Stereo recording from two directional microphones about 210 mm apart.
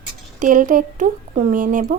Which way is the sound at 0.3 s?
40° right (ahead or behind).